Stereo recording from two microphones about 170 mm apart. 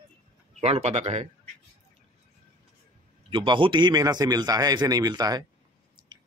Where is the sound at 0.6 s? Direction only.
40° right (ahead or behind).